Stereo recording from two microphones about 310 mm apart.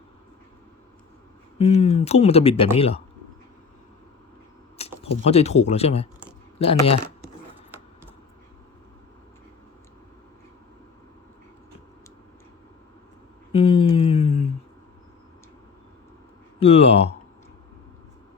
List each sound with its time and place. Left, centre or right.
1.5 s speech: centre
4.8 s speech: centre
13.5 s a sound: centre
16.6 s speech: centre